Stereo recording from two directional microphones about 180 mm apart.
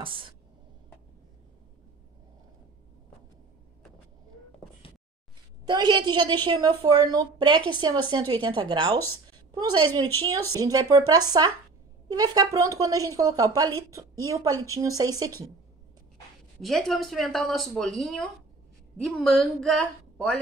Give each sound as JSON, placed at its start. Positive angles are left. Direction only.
{"t": 0.0, "sound": "speech", "side_deg": -30}
{"t": 5.7, "sound": "a woman's voice", "side_deg": -25}
{"t": 16.6, "sound": "speech", "side_deg": 0}